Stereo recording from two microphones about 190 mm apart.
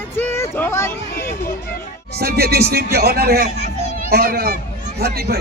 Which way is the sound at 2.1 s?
55° right (ahead or behind).